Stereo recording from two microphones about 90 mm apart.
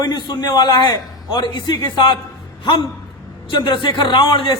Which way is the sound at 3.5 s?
60° left (ahead or behind).